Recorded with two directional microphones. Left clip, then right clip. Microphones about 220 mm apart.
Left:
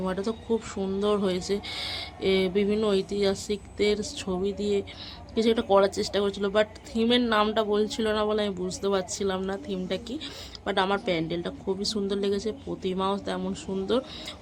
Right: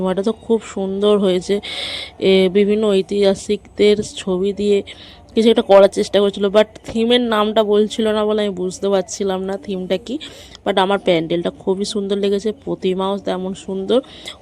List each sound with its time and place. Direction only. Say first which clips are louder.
0.0 s a woman's voice: right 11 dB; 35° right (ahead or behind)